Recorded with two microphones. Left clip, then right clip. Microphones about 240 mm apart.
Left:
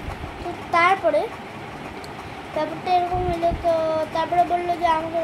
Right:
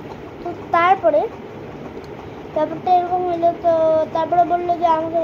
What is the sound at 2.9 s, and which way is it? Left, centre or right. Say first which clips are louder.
A child's voice: right 4 dB; centre.